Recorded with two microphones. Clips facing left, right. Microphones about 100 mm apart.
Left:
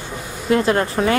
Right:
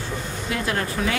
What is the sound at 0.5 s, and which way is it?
Speech, 35° left (ahead or behind).